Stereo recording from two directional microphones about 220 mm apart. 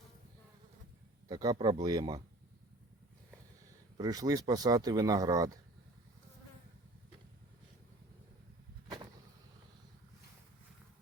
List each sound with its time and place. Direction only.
1.3 s speech: 15° right (ahead or behind)
3.9 s speech: 15° right (ahead or behind)